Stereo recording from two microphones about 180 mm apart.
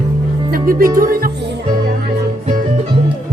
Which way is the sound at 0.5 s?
50° right (ahead or behind).